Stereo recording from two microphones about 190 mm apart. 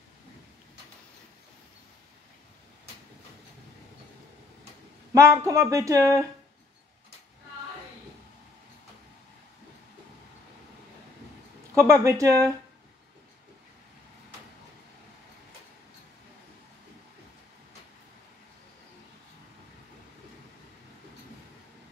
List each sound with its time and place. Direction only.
5.1 s speech: 15° right (ahead or behind)
11.7 s speech: 15° right (ahead or behind)